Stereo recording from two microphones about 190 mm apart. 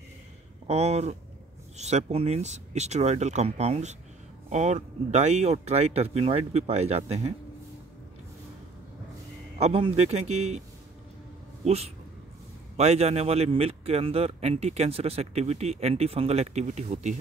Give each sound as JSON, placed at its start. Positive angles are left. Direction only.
{"t": 0.7, "sound": "speech", "side_deg": -35}
{"t": 9.6, "sound": "speech", "side_deg": -30}
{"t": 11.6, "sound": "speech", "side_deg": -35}